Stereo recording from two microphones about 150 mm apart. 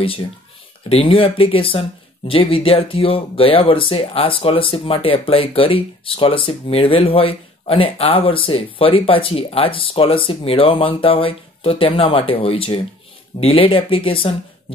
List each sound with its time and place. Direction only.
0.8 s speech: 40° left (ahead or behind)